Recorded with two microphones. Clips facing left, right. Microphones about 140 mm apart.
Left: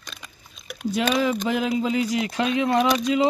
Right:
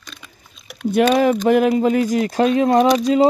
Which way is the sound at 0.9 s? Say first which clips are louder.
Right 8 dB; 55° right (ahead or behind).